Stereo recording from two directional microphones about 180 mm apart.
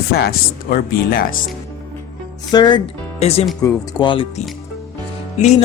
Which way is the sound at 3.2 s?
35° left (ahead or behind).